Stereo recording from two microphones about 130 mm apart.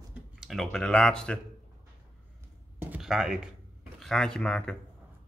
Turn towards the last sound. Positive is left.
turn(degrees=10)  # may be behind; listen again after turning